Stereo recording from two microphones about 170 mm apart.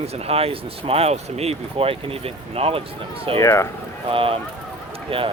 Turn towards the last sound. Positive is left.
turn(degrees=-30)  # may be behind; listen again after turning